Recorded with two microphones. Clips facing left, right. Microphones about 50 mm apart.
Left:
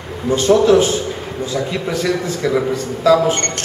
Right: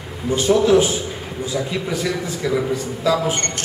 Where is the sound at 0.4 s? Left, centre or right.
Centre.